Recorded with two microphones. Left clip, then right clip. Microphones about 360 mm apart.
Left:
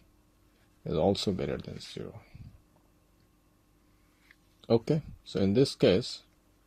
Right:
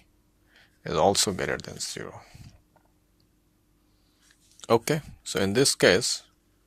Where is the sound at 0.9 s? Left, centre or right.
Right.